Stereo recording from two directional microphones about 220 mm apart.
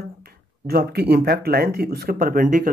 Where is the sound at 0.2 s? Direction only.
45° right (ahead or behind).